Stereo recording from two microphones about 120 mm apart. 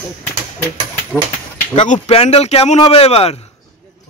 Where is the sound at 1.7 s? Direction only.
85° left.